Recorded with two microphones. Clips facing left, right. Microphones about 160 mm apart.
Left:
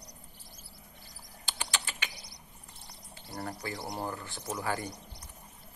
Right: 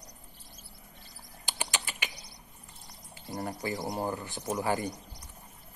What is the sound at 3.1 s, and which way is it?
Speech, 15° right (ahead or behind).